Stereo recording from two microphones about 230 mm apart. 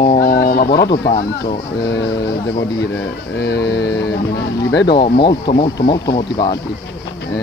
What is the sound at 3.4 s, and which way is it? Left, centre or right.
Speech, left.